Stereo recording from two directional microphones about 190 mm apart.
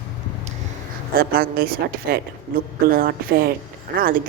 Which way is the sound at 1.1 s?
50° right (ahead or behind).